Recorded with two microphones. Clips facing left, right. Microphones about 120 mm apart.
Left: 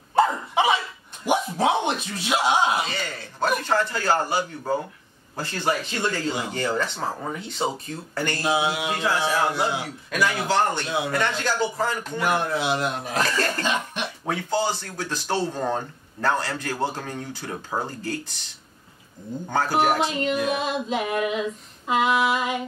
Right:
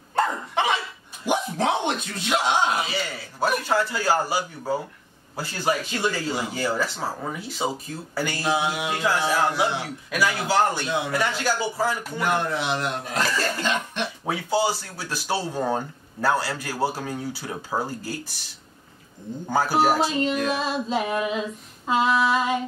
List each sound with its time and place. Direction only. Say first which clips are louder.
0.1 s dog: left 3 dB; 10° left (ahead or behind)
1.2 s bow-wow: left 2 dB; 10° left (ahead or behind)
2.9 s speech: right 2 dB; 10° right (ahead or behind)
8.5 s speech: left 1 dB; 10° left (ahead or behind)
8.9 s speech: right 2 dB; centre (ahead or behind)
12.2 s speech: left 1 dB; 10° left (ahead or behind)
13.2 s speech: left 1 dB; 10° right (ahead or behind)
13.7 s cough: even; 15° left (ahead or behind)
14.2 s speech: right 1 dB; 10° right (ahead or behind)
19.5 s speech: right 1 dB; 5° right (ahead or behind)
20.1 s female singing: even; 35° right (ahead or behind)